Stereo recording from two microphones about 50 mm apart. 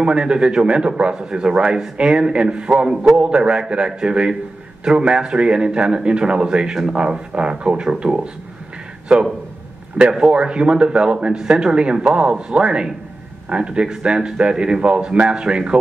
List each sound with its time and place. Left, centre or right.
0.0 s a man's voice: right
9.9 s speech: centre